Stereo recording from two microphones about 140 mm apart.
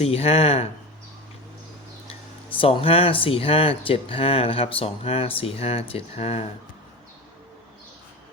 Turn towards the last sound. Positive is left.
turn(degrees=45)  # may be behind; listen again after turning